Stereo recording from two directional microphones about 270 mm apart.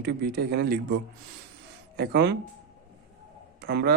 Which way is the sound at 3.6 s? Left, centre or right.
Right.